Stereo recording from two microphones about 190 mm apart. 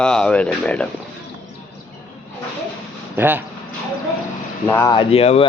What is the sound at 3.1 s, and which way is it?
Speech, 10° right (ahead or behind).